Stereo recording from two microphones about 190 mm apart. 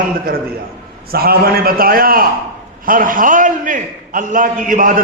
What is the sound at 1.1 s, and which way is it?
A man's voice, 55° right (ahead or behind).